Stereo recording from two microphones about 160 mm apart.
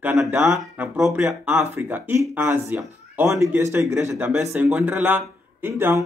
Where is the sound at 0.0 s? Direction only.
10° right (ahead or behind).